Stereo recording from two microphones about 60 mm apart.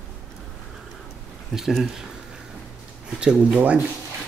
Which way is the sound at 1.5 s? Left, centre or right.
Centre.